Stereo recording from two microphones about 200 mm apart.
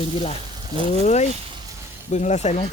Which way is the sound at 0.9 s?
35° left (ahead or behind).